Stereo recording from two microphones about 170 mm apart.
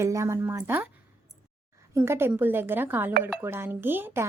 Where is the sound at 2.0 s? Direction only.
15° right (ahead or behind).